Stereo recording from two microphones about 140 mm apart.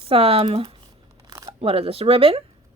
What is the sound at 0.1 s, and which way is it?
A woman's voice, 45° right (ahead or behind).